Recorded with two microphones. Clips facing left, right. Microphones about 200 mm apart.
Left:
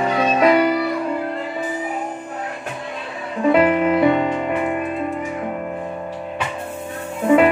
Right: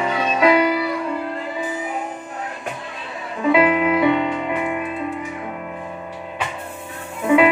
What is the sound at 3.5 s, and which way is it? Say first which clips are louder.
Music: left 1 dB; 45° left (ahead or behind).